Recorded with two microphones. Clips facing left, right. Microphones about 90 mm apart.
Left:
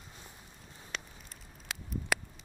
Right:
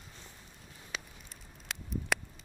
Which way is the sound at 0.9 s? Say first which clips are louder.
Even; 5° right (ahead or behind).